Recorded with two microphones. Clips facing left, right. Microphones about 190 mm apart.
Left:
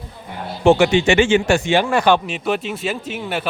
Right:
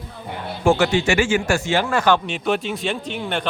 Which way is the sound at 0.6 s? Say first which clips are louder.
Left 4 dB; 20° left (ahead or behind).